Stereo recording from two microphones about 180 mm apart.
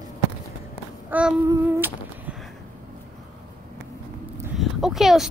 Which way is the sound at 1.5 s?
10° right (ahead or behind).